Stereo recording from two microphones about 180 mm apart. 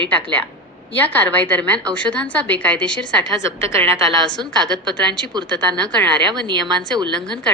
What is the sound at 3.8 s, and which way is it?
Speech, 25° right (ahead or behind).